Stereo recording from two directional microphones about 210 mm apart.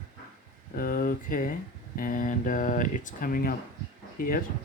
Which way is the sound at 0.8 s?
45° left (ahead or behind).